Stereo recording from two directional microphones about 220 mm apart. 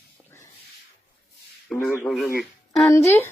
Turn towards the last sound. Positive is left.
turn(degrees=10)  # may be behind; listen again after turning